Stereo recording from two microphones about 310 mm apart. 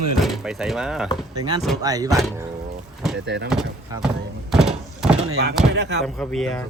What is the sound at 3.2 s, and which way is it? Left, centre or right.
Speech, right.